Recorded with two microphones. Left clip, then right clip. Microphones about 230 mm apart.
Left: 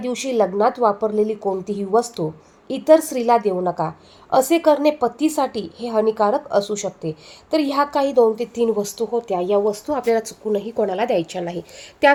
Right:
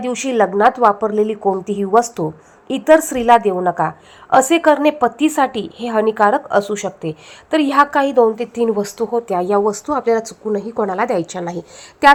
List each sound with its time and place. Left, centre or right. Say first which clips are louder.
0.1 s a woman's voice: right 3 dB; centre
6.6 s speech: right 3 dB; right
7.0 s a woman's voice: right 3 dB; centre
9.8 s a woman's voice: right 3 dB; centre